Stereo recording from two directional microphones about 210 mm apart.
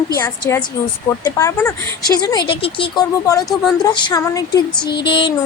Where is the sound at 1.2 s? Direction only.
15° left (ahead or behind).